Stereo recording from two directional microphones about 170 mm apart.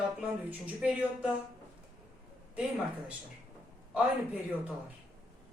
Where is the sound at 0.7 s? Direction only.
Centre (ahead or behind).